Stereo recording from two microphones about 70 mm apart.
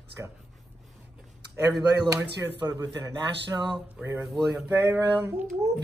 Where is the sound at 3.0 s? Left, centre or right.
Right.